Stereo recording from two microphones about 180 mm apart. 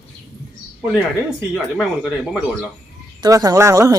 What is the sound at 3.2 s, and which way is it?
Speech, 20° right (ahead or behind).